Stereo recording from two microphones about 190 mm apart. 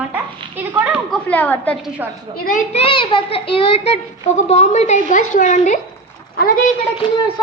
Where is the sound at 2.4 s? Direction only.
45° left (ahead or behind).